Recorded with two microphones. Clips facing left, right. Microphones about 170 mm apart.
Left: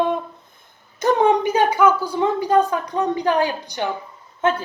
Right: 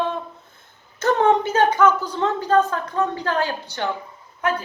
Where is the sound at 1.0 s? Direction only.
15° left (ahead or behind).